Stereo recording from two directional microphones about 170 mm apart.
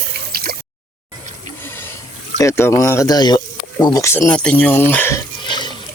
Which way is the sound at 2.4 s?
15° left (ahead or behind).